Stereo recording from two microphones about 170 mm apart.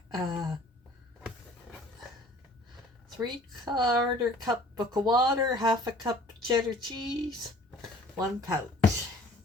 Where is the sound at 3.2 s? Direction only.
25° right (ahead or behind).